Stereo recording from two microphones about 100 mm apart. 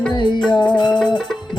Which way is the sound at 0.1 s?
50° left (ahead or behind).